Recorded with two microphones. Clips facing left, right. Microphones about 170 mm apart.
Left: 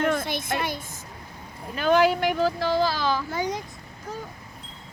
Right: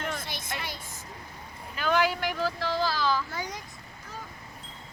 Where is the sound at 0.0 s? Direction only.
55° left (ahead or behind).